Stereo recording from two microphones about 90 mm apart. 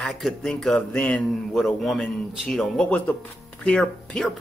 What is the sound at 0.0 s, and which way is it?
Speech, 5° left (ahead or behind).